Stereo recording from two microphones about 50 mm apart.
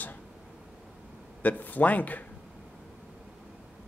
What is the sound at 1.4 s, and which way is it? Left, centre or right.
Speech, left.